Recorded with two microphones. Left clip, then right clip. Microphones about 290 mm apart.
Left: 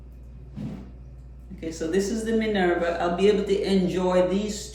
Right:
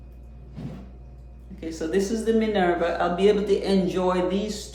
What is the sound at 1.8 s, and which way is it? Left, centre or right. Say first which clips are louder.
A man's voice: right 1 dB; centre.